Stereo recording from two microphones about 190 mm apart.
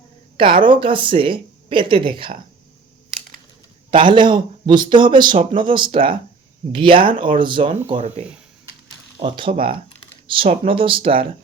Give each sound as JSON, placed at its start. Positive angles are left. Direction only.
{"t": 0.3, "sound": "speech", "side_deg": -25}
{"t": 3.9, "sound": "speech", "side_deg": -25}
{"t": 7.9, "sound": "speech", "side_deg": -35}